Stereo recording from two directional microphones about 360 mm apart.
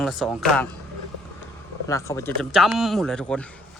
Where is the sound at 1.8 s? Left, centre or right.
Centre.